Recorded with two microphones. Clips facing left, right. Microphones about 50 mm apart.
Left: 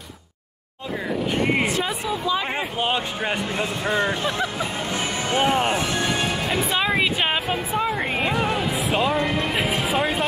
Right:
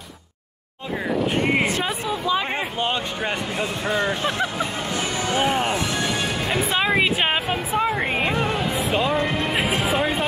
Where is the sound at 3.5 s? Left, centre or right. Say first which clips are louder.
Even; left.